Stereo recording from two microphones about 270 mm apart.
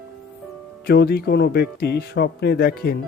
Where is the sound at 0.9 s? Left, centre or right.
Left.